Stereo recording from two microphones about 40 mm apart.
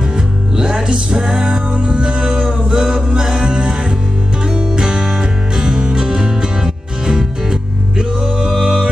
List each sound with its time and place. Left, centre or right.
0.6 s music: right